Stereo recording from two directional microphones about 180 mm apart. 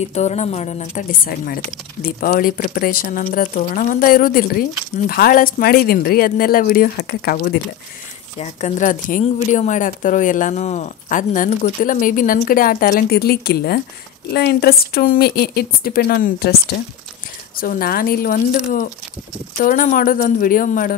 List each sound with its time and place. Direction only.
0.1 s a woman's voice: 40° left (ahead or behind)
1.2 s a woman's voice: 55° left (ahead or behind)
8.4 s a woman's voice: 40° left (ahead or behind); by 16.5 s 60° left (ahead or behind)
17.6 s speech: 55° left (ahead or behind)